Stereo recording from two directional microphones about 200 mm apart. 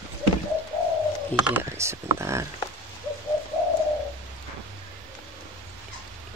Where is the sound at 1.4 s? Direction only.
10° right (ahead or behind).